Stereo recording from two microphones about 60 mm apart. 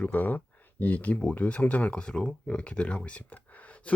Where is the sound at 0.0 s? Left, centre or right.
Left.